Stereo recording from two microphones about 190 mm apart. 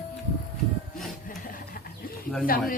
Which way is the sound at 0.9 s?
Centre (ahead or behind).